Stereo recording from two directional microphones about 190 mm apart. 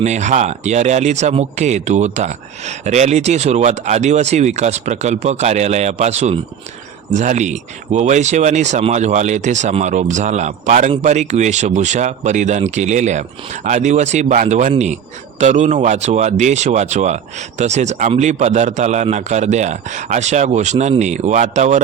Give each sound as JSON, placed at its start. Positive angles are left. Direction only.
{"t": 0.0, "sound": "speech", "side_deg": -40}